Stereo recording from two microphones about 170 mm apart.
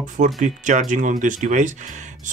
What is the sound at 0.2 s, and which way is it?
Speech, 45° right (ahead or behind).